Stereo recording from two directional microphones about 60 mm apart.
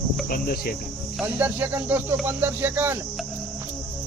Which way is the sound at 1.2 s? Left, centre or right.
Right.